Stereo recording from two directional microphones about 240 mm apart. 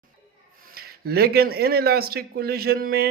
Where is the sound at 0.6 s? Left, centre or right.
Right.